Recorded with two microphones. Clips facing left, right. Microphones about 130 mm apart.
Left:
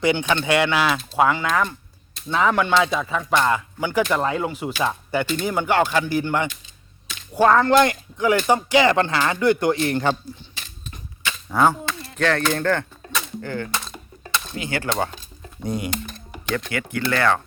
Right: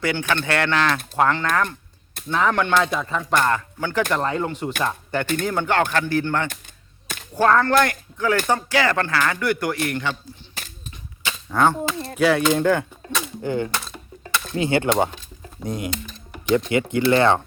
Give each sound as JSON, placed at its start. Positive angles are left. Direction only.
{"t": 0.0, "sound": "speech", "side_deg": 20}
{"t": 2.3, "sound": "music", "side_deg": 5}
{"t": 3.4, "sound": "speech", "side_deg": 10}
{"t": 5.2, "sound": "speech", "side_deg": -55}
{"t": 5.5, "sound": "speech", "side_deg": 10}
{"t": 9.9, "sound": "a man's voice", "side_deg": 40}
{"t": 11.5, "sound": "music", "side_deg": 5}
{"t": 12.1, "sound": "speech", "side_deg": -10}
{"t": 13.1, "sound": "a sound", "side_deg": -15}
{"t": 14.5, "sound": "speech", "side_deg": -30}
{"t": 15.6, "sound": "music", "side_deg": 0}
{"t": 16.6, "sound": "speech", "side_deg": -20}